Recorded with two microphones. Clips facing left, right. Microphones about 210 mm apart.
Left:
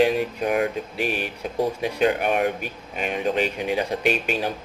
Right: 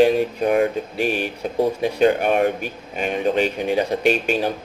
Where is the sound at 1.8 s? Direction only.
35° right (ahead or behind).